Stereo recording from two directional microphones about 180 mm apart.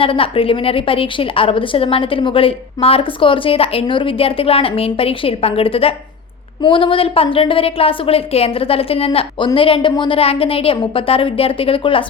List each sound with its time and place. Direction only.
0.0 s a woman's voice: 30° left (ahead or behind)